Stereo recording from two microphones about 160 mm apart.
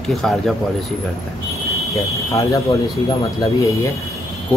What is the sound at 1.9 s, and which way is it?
Speech, 20° left (ahead or behind).